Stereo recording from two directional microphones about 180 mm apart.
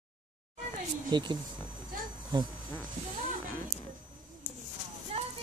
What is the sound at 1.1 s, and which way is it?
Speech, 25° right (ahead or behind).